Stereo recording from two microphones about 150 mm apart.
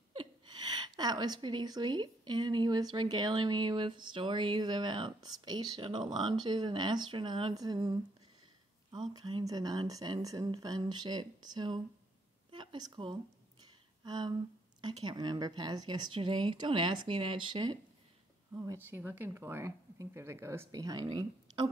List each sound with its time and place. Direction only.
0.1 s a woman's voice: 35° right (ahead or behind)
12.4 s a sound: 30° right (ahead or behind)
14.0 s a woman's voice: 30° right (ahead or behind)
18.5 s speech: 15° right (ahead or behind); by 21.6 s 30° right (ahead or behind)